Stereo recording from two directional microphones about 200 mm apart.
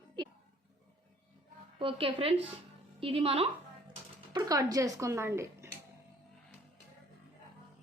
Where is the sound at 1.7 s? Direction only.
25° right (ahead or behind).